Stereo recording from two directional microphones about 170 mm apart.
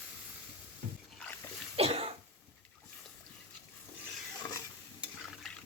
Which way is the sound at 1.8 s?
35° right (ahead or behind).